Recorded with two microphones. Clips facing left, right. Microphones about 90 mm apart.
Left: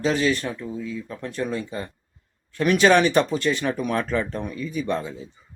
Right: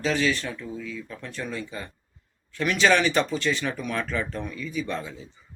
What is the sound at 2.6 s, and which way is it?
Speech, 45° left (ahead or behind).